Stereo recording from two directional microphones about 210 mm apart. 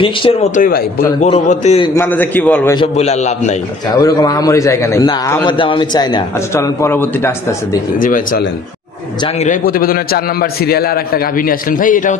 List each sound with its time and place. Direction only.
0.0 s a man's voice: 25° left (ahead or behind)
2.0 s a man's voice: 10° left (ahead or behind)
2.7 s a man's voice: 25° left (ahead or behind)
3.9 s a man's voice: 15° left (ahead or behind)
8.0 s a man's voice: 40° left (ahead or behind)